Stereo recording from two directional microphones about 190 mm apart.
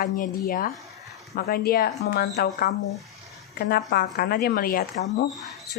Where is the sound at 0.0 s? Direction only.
45° left (ahead or behind).